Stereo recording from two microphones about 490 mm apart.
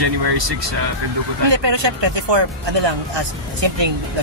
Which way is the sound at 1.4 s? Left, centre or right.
Right.